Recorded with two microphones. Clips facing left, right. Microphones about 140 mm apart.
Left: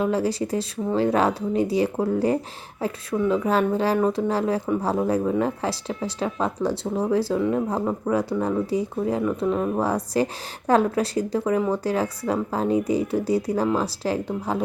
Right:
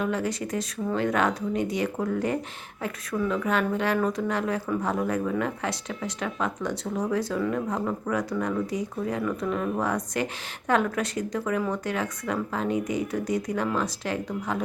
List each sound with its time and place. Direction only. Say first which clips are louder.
0.0 s speech: left 5 dB; 30° left (ahead or behind)